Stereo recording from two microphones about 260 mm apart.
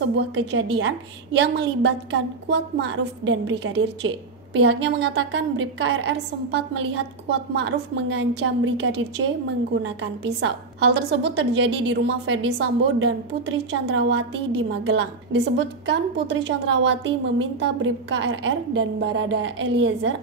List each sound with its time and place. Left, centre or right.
0.2 s a woman's voice: right